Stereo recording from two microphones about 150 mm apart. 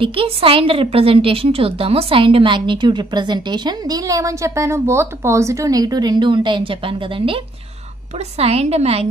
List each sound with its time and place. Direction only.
0.0 s a woman's voice: 35° right (ahead or behind)
8.4 s a woman's voice: 45° right (ahead or behind)